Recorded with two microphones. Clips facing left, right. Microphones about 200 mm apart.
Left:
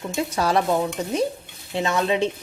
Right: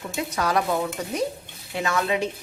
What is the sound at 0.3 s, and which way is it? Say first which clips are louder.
Speech: left 2 dB; 30° left (ahead or behind).